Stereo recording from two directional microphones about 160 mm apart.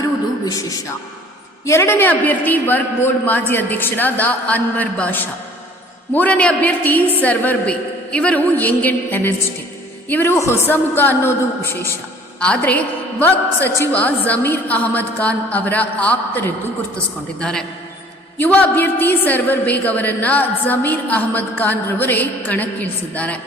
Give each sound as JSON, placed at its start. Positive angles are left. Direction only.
{"t": 0.4, "sound": "a man's voice", "side_deg": 20}